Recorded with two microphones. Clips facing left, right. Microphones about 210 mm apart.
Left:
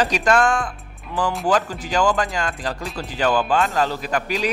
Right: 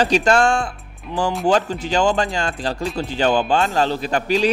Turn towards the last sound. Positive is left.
turn(degrees=-30)  # may be behind; listen again after turning